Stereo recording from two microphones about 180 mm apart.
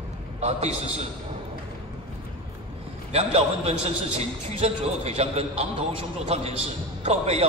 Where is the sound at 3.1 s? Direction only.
35° right (ahead or behind).